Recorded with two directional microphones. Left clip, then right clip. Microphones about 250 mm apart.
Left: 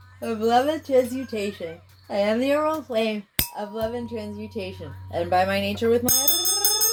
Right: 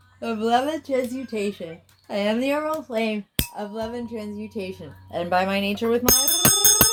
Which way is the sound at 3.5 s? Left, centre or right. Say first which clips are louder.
Left 5 dB; right.